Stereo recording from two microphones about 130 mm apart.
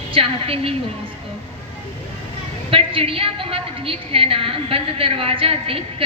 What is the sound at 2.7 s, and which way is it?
A woman's voice, 45° right (ahead or behind).